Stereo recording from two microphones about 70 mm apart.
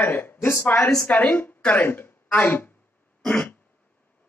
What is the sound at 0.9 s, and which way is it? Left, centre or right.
Speech, centre.